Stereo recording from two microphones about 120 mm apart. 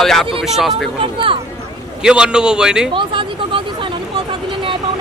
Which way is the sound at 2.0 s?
5° right (ahead or behind).